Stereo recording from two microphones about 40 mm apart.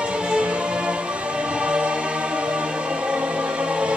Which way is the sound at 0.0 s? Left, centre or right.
Right.